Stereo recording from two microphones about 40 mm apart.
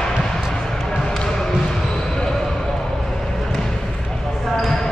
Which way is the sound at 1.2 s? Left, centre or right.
Centre.